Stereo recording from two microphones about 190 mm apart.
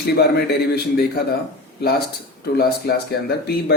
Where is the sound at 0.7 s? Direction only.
55° left (ahead or behind).